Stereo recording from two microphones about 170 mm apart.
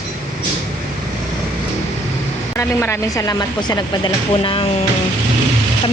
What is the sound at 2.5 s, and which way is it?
Speech, 15° left (ahead or behind).